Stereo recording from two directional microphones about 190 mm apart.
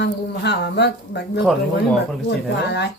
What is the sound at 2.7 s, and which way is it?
Speech, 60° left (ahead or behind).